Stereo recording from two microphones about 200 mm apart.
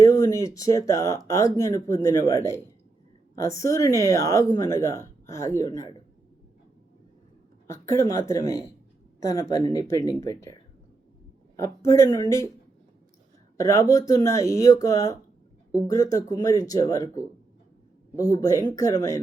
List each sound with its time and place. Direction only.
0.0 s speech: 15° left (ahead or behind)
7.7 s speech: 15° left (ahead or behind)
11.5 s speech: 15° left (ahead or behind)
13.6 s speech: 15° left (ahead or behind)